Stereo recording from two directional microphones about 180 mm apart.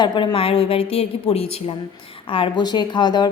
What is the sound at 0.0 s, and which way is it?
A woman's voice, 25° left (ahead or behind).